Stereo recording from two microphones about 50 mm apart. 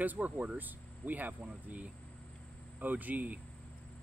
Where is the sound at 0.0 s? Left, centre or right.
Right.